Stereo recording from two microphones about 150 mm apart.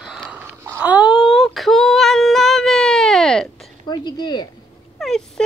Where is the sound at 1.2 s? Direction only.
Centre (ahead or behind).